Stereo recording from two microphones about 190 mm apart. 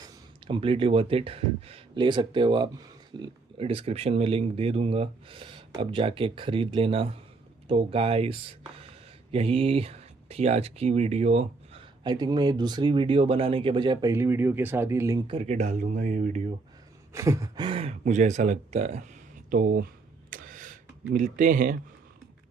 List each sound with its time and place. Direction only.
0.4 s speech: 30° right (ahead or behind)
15.3 s speech: 35° right (ahead or behind)
17.1 s speech: 15° right (ahead or behind); by 19.0 s 35° right (ahead or behind)
19.5 s speech: 45° right (ahead or behind)
20.3 s a sound: 45° right (ahead or behind)
21.1 s speech: 45° right (ahead or behind)